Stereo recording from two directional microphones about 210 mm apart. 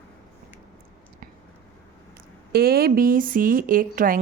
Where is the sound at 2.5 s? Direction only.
45° right (ahead or behind).